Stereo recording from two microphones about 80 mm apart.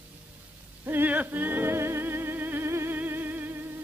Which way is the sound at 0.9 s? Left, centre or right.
Right.